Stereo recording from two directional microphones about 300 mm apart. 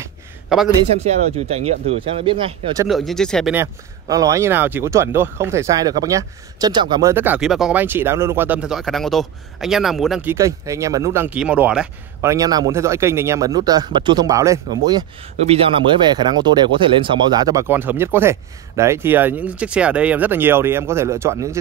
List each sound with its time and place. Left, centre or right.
0.0 s a sound: centre
0.7 s speech: right
2.9 s speech: centre